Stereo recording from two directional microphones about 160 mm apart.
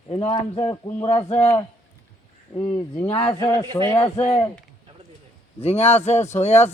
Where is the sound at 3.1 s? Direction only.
35° left (ahead or behind).